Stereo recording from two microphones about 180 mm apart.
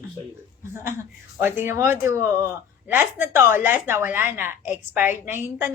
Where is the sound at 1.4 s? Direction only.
15° right (ahead or behind).